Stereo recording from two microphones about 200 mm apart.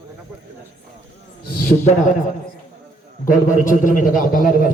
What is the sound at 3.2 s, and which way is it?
A man's voice, 40° left (ahead or behind).